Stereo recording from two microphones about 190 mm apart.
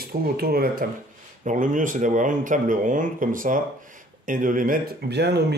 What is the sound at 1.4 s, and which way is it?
Speech, 40° right (ahead or behind).